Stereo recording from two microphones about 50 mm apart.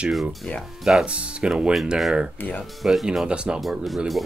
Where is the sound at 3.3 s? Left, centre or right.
Centre.